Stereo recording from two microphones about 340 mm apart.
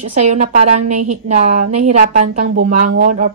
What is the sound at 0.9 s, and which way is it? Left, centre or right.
Speech, right.